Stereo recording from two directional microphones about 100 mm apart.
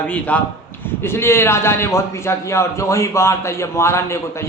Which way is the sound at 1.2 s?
25° left (ahead or behind).